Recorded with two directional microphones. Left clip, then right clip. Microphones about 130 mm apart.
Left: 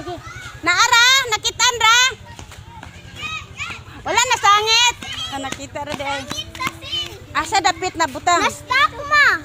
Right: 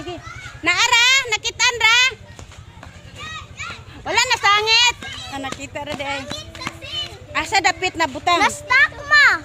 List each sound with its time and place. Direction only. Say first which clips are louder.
0.6 s a sound: left 2 dB; 10° right (ahead or behind)
4.0 s a sound: left 1 dB; centre (ahead or behind)
6.3 s a child's voice: left 3 dB; 15° left (ahead or behind)
6.8 s children playing: left 2 dB; 35° right (ahead or behind)
7.3 s speech: even; 10° right (ahead or behind)
9.0 s children playing: right 1 dB; 20° right (ahead or behind)